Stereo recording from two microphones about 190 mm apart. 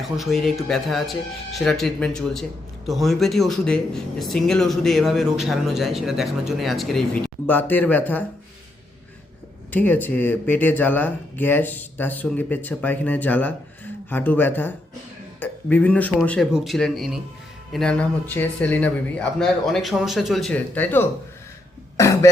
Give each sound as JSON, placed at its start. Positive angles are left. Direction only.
{"t": 0.0, "sound": "speech", "side_deg": 0}
{"t": 9.7, "sound": "speech", "side_deg": 10}
{"t": 21.9, "sound": "cough", "side_deg": 15}